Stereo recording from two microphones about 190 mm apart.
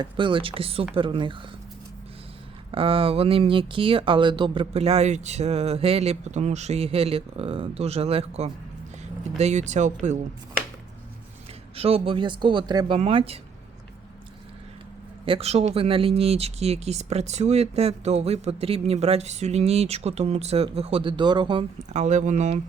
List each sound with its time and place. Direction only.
0.0 s speech: 25° right (ahead or behind)
2.7 s speech: 30° right (ahead or behind)
11.8 s speech: 30° right (ahead or behind)
15.2 s speech: 30° right (ahead or behind)
21.9 s speech: 40° right (ahead or behind)